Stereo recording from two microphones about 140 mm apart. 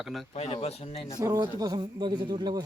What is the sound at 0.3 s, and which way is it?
Speech, 50° left (ahead or behind).